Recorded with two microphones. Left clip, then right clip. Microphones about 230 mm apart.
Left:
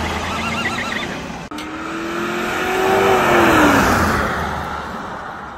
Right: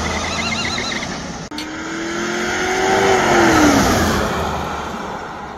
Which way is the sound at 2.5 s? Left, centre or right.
Left.